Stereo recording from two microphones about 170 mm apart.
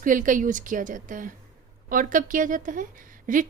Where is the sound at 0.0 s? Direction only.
50° right (ahead or behind).